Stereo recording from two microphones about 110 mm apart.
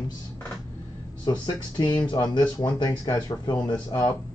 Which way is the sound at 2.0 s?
40° left (ahead or behind).